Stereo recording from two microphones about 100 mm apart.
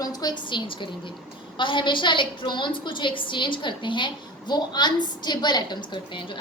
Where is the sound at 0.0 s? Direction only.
40° left (ahead or behind).